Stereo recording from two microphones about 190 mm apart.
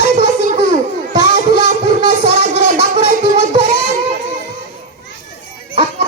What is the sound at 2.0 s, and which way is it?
Music, 60° left (ahead or behind).